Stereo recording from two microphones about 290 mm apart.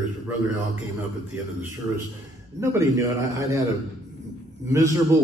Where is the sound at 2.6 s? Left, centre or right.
Centre.